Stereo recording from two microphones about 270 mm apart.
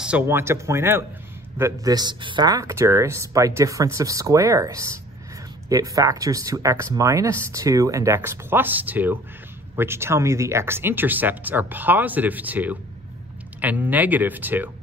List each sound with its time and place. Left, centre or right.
0.0 s speech: centre